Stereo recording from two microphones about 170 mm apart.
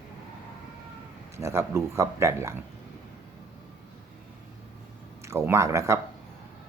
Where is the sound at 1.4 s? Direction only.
15° right (ahead or behind).